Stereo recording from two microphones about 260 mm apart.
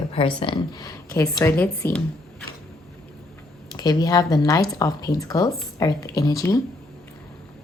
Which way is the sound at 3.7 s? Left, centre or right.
Centre.